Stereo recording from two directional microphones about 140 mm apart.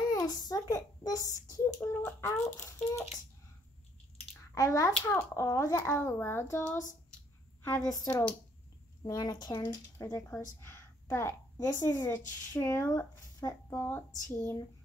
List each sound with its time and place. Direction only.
0.1 s a sound: 25° left (ahead or behind)
1.8 s speech: 20° left (ahead or behind)
4.6 s speech: 25° left (ahead or behind)
4.9 s speech: 10° left (ahead or behind)
8.1 s speech: 10° left (ahead or behind)
9.0 s speech: 30° left (ahead or behind)